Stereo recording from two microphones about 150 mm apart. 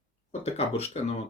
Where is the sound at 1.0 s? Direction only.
50° left (ahead or behind).